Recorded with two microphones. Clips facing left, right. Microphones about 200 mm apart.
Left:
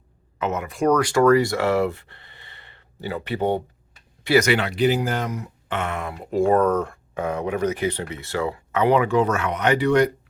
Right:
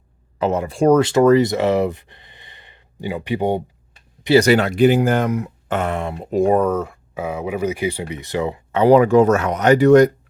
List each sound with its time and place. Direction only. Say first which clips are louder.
0.3 s speech: right 6 dB; 35° right (ahead or behind); by 3.6 s 15° right (ahead or behind)
4.4 s speech: right 6 dB; 40° right (ahead or behind)
6.3 s speech: right 2 dB; 15° right (ahead or behind)
8.8 s speech: right 7 dB; 40° right (ahead or behind)